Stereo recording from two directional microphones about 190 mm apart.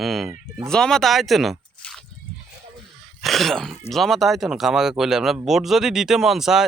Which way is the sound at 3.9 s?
Centre (ahead or behind).